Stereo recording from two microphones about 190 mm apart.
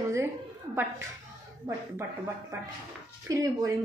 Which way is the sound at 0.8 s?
10° right (ahead or behind).